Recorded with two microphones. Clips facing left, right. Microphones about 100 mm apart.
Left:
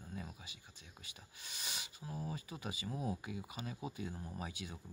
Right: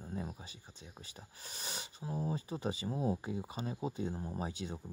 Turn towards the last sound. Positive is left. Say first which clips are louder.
# right 6 dB
turn(degrees=-30)  # may be behind; listen again after turning